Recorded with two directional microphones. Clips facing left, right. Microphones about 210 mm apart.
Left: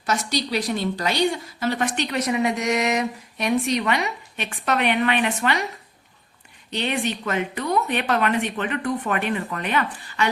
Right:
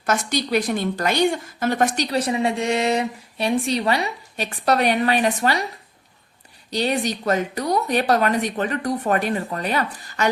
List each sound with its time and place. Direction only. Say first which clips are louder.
0.0 s a woman's voice: right 2 dB; 50° right (ahead or behind)
6.7 s a woman's voice: right 3 dB; 35° right (ahead or behind)